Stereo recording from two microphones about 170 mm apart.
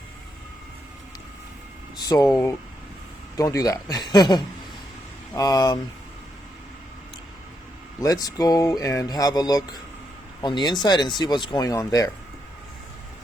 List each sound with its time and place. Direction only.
2.0 s speech: 20° left (ahead or behind)
8.0 s speech: 20° left (ahead or behind)